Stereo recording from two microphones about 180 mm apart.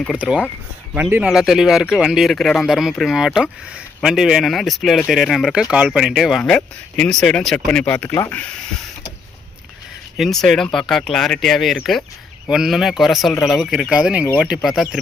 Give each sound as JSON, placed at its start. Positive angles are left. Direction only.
{"t": 0.2, "sound": "speech", "side_deg": -5}
{"t": 10.2, "sound": "speech", "side_deg": 0}